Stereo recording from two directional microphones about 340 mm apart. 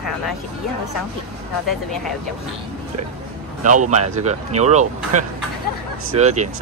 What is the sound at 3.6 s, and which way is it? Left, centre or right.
Speech, right.